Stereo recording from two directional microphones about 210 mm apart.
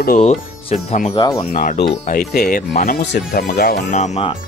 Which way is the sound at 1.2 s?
20° left (ahead or behind).